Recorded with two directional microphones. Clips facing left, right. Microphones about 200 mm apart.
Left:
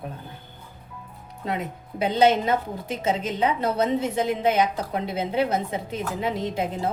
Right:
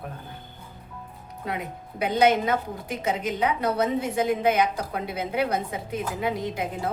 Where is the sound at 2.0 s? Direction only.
25° left (ahead or behind).